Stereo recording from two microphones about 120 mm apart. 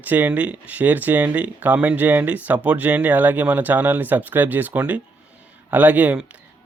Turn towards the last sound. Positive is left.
turn(degrees=-10)  # may be behind; listen again after turning